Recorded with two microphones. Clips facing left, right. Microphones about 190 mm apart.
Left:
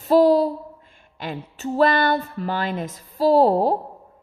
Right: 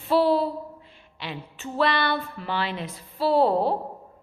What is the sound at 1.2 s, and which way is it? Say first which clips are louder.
A woman's voice: left 6 dB; 45° left (ahead or behind).